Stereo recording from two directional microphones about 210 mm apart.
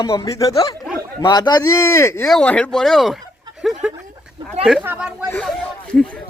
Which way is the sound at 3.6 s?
Centre (ahead or behind).